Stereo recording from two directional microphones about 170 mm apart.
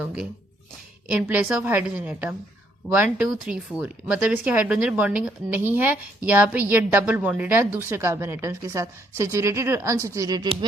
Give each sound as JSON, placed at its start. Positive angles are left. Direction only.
{"t": 0.0, "sound": "speech", "side_deg": -5}